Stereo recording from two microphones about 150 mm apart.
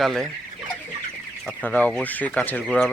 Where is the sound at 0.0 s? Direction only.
Centre (ahead or behind).